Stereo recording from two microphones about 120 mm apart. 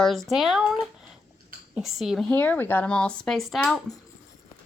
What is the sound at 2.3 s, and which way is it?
Speech, 15° left (ahead or behind).